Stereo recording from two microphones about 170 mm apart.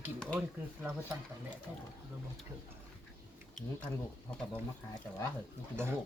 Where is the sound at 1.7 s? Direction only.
10° right (ahead or behind).